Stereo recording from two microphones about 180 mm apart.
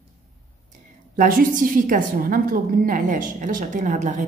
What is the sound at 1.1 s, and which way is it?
A woman's voice, 45° right (ahead or behind).